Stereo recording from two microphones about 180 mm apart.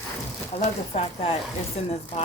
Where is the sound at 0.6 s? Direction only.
35° left (ahead or behind).